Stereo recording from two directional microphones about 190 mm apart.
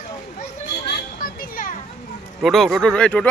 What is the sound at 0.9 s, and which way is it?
Children playing, 55° left (ahead or behind).